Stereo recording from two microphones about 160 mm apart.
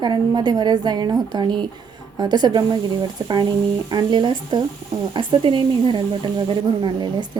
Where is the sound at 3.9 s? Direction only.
25° right (ahead or behind).